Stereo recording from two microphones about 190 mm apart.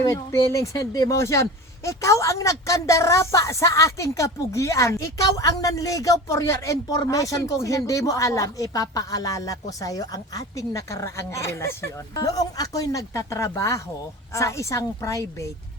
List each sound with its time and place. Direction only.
0.0 s speech: 15° left (ahead or behind)